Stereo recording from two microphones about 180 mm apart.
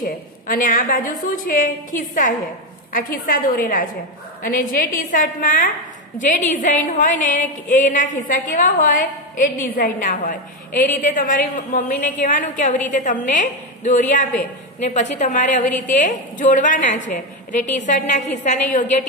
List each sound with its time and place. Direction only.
0.0 s a woman's voice: 50° left (ahead or behind)